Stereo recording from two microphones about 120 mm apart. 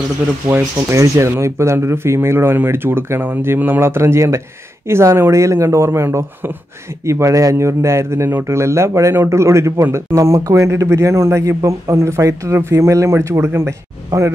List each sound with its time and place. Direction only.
0.5 s a man's voice: 25° right (ahead or behind)